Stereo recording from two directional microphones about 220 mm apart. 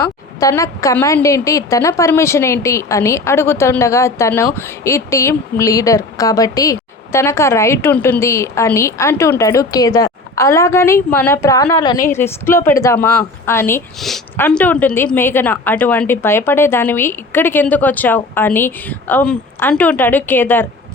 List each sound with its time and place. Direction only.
0.0 s a woman's voice: 15° left (ahead or behind)